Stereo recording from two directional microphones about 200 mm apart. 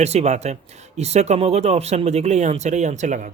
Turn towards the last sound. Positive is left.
turn(degrees=-40)  # may be behind; listen again after turning